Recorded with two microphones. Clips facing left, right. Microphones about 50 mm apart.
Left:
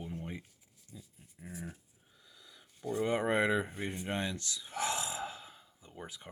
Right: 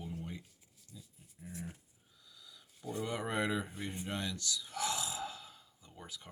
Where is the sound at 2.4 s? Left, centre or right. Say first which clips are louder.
Even; left.